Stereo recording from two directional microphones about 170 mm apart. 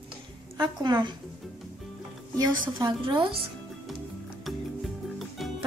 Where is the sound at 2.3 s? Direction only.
25° right (ahead or behind).